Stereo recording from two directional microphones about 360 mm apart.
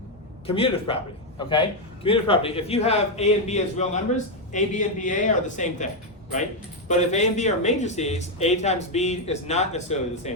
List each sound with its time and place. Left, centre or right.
0.4 s a man's voice: centre